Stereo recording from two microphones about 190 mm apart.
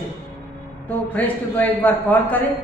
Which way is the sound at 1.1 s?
10° left (ahead or behind).